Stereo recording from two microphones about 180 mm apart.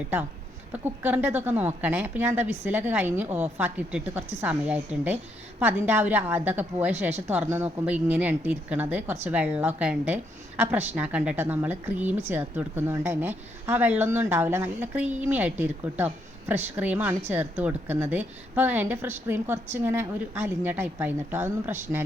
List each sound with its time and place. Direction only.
0.7 s a woman's voice: 10° right (ahead or behind)